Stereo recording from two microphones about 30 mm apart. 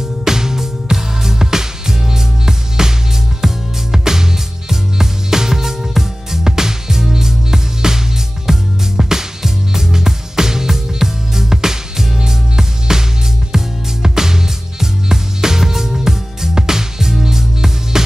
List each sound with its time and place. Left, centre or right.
0.2 s music: centre
14.0 s music: centre